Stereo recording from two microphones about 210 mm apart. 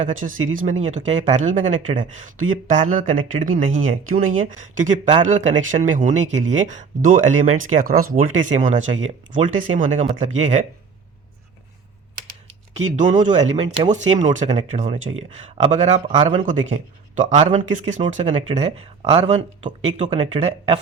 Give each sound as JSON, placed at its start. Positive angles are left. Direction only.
{"t": 0.0, "sound": "speech", "side_deg": -40}
{"t": 12.7, "sound": "speech", "side_deg": -35}
{"t": 16.5, "sound": "speech", "side_deg": -35}